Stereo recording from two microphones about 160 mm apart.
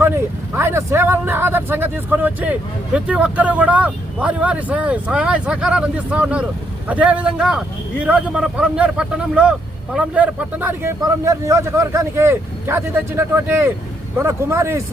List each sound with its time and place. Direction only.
0.0 s speech: 15° right (ahead or behind)